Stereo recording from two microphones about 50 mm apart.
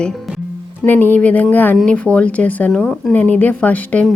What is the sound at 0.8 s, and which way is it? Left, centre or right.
Speech, left.